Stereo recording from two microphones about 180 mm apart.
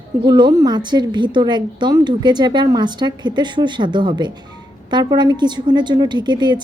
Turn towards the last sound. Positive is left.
turn(degrees=-25)  # may be behind; listen again after turning